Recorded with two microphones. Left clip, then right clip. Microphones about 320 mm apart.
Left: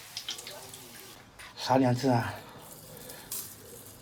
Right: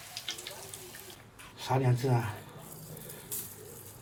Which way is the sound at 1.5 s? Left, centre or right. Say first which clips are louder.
Left 6 dB; left.